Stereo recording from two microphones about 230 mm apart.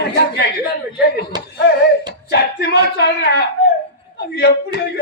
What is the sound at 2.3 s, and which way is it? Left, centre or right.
A man's voice, left.